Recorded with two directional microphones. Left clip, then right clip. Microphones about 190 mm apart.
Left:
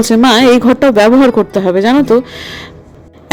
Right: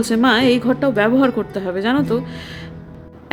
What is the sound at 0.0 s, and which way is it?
Speech, 30° left (ahead or behind).